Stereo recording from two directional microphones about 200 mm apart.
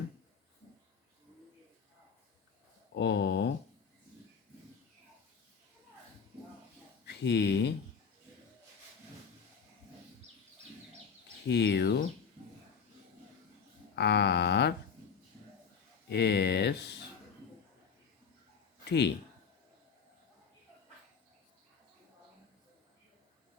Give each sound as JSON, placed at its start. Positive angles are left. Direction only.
{"t": 2.9, "sound": "a sound", "side_deg": 60}
{"t": 7.0, "sound": "speech", "side_deg": 60}
{"t": 11.4, "sound": "speech", "side_deg": 60}
{"t": 13.9, "sound": "a sound", "side_deg": 55}
{"t": 16.0, "sound": "speech", "side_deg": 55}
{"t": 18.9, "sound": "a man's voice", "side_deg": 60}